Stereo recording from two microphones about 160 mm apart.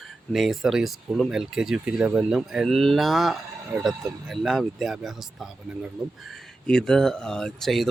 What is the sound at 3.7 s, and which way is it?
Speech, 20° right (ahead or behind).